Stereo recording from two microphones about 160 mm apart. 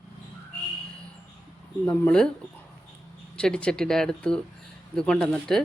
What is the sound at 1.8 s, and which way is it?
Speech, 10° left (ahead or behind).